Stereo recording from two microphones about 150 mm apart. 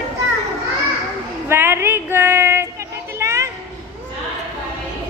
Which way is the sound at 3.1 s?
20° right (ahead or behind).